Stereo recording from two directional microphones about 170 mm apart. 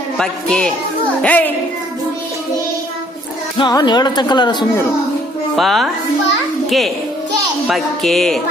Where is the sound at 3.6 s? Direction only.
25° left (ahead or behind).